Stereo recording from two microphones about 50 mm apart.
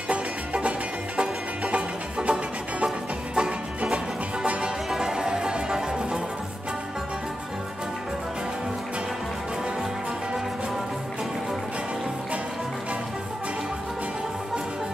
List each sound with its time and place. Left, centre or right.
0.1 s music: right